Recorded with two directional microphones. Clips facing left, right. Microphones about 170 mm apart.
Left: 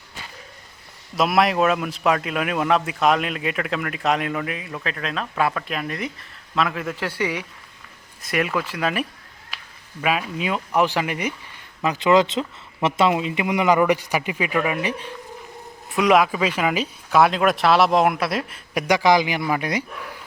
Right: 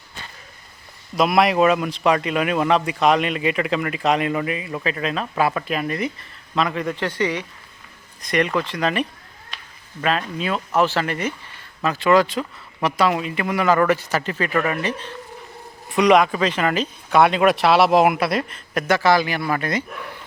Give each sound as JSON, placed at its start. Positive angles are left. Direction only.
{"t": 1.1, "sound": "a man's voice", "side_deg": 0}
{"t": 9.5, "sound": "a sound", "side_deg": 5}
{"t": 10.0, "sound": "a man's voice", "side_deg": 10}